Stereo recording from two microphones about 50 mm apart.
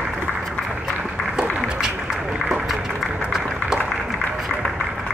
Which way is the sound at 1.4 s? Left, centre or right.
Centre.